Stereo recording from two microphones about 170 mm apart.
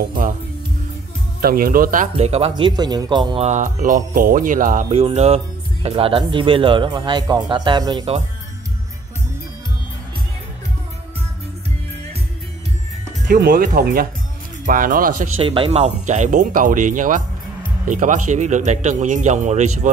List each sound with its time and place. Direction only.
1.4 s speech: 60° right (ahead or behind)
2.1 s speech: 35° right (ahead or behind)
3.4 s speech: 50° right (ahead or behind)
4.9 s speech: 40° right (ahead or behind)
13.3 s speech: 60° right (ahead or behind)
15.3 s speech: 30° right (ahead or behind)